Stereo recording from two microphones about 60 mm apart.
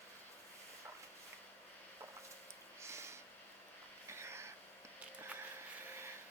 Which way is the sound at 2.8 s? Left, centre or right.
Right.